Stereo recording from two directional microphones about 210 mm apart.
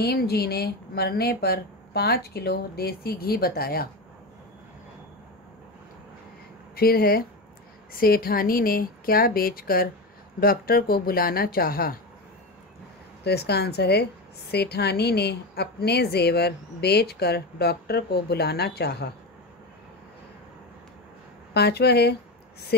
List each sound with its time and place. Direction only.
0.0 s a woman's voice: 50° left (ahead or behind)
6.7 s a woman's voice: 45° left (ahead or behind)
13.2 s a woman's voice: 50° left (ahead or behind)
21.5 s a woman's voice: 50° left (ahead or behind)